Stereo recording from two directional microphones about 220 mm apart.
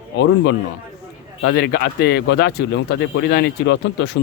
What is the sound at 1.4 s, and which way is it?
Speech, 45° left (ahead or behind).